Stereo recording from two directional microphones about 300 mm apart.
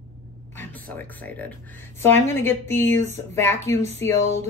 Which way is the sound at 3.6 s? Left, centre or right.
Right.